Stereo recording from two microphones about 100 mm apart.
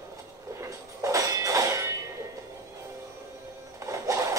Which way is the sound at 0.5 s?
30° right (ahead or behind).